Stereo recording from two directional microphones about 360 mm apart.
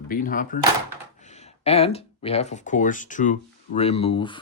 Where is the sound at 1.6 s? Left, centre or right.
Centre.